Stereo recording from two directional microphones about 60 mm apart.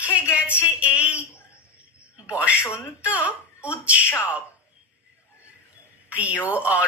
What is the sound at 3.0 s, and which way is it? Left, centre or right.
Speech, right.